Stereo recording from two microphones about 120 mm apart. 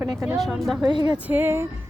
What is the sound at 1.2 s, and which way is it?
Speech, 15° right (ahead or behind).